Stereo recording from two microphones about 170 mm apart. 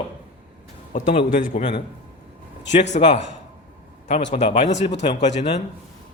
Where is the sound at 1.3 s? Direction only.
50° left (ahead or behind).